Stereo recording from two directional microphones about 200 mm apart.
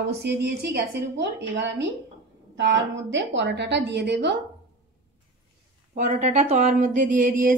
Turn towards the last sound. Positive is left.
turn(degrees=-40)  # may be behind; listen again after turning